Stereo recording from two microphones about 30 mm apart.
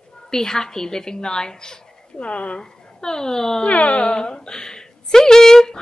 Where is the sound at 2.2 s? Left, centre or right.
Left.